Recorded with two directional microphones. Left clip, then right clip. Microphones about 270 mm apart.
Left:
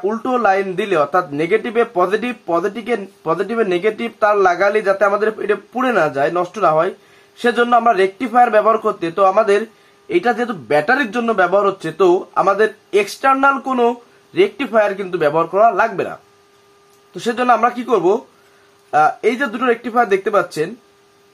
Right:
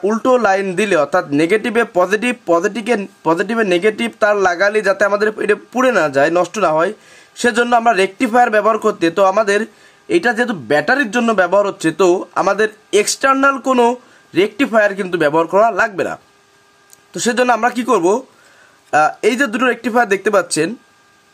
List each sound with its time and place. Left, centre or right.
0.0 s speech: right